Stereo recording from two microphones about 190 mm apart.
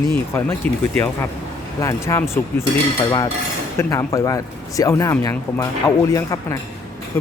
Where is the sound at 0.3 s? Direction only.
10° left (ahead or behind).